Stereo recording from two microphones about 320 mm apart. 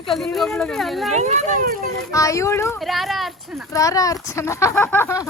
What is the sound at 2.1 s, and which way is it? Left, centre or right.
Speech, centre.